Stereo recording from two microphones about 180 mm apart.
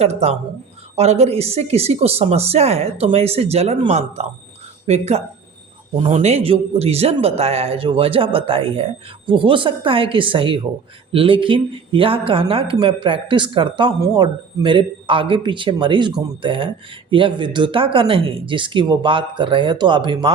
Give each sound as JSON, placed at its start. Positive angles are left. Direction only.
{"t": 0.0, "sound": "a man's voice", "side_deg": -35}